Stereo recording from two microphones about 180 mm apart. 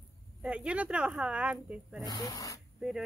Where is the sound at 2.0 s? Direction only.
20° left (ahead or behind).